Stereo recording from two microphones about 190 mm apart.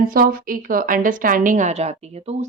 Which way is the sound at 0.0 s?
50° right (ahead or behind).